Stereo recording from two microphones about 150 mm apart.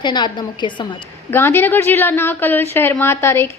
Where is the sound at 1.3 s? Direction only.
15° left (ahead or behind).